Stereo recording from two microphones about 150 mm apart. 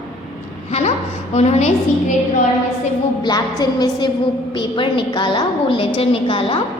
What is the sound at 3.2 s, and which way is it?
A woman's voice, 25° left (ahead or behind).